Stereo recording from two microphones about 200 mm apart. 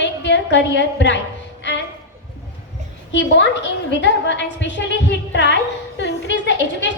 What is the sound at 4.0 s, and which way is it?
A woman's voice, 65° left (ahead or behind).